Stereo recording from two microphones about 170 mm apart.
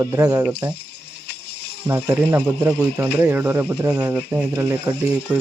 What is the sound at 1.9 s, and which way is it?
Speech, 10° right (ahead or behind).